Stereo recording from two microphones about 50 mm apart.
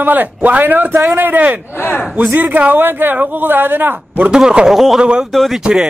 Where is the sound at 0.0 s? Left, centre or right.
Right.